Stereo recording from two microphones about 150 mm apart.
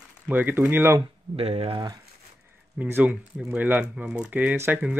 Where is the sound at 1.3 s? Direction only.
45° right (ahead or behind).